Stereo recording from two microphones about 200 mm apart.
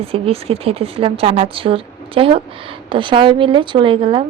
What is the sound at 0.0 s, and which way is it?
A woman's voice, 30° right (ahead or behind).